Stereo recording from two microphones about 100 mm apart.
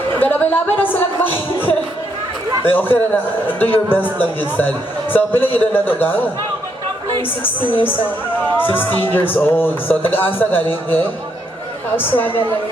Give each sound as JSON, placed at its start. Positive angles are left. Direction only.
{"t": 0.2, "sound": "a man's voice", "side_deg": 20}
{"t": 1.2, "sound": "music", "side_deg": 20}
{"t": 2.6, "sound": "a man's voice", "side_deg": 20}
{"t": 8.5, "sound": "a man's voice", "side_deg": 20}